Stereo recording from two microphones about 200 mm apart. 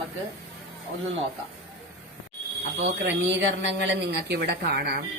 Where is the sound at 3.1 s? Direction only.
65° right (ahead or behind).